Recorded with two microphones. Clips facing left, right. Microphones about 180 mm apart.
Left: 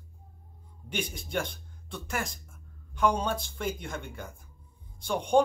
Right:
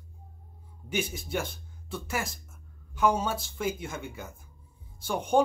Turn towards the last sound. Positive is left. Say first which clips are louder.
# left 1 dB
turn(degrees=-5)  # may be behind; listen again after turning